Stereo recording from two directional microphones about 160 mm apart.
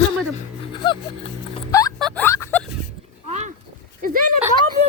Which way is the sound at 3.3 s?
45° right (ahead or behind).